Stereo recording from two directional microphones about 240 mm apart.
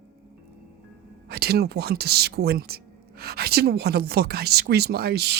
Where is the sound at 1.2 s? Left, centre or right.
Right.